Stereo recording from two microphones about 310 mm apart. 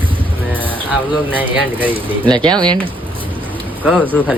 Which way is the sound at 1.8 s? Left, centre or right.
Centre.